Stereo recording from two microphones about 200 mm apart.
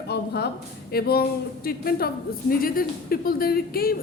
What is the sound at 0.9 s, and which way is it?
Speech, 50° left (ahead or behind).